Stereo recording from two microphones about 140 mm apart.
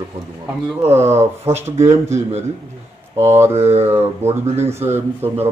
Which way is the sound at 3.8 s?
15° right (ahead or behind).